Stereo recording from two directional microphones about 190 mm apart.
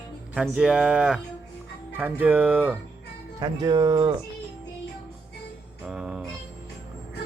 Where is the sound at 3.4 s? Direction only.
20° right (ahead or behind).